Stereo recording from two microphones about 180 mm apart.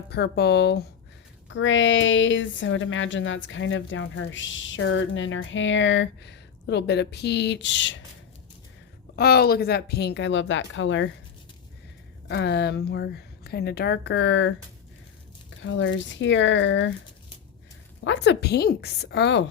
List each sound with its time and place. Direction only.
0.1 s a woman's voice: 65° left (ahead or behind)
1.5 s a woman's voice: 90° left
9.1 s a woman's voice: 60° left (ahead or behind); by 11.1 s 90° left
12.3 s a woman's voice: 70° left (ahead or behind); by 14.5 s 85° left
15.6 s a woman's voice: 90° left
18.0 s a woman's voice: 80° left